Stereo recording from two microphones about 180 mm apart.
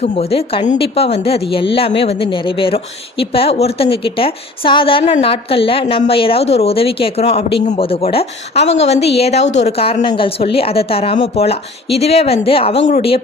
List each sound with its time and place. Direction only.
0.0 s a woman's voice: 35° left (ahead or behind)